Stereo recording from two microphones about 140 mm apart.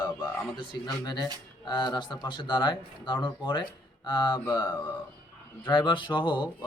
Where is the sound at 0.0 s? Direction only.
30° left (ahead or behind).